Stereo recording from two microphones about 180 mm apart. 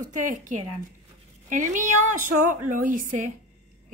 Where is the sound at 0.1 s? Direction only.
45° right (ahead or behind).